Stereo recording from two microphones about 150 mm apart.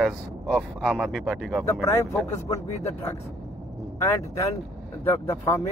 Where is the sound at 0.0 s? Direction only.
Centre (ahead or behind).